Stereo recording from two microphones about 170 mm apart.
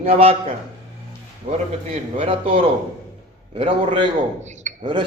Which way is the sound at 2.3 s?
35° right (ahead or behind).